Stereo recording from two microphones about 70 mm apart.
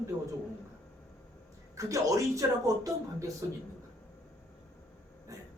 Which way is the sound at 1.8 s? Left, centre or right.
Right.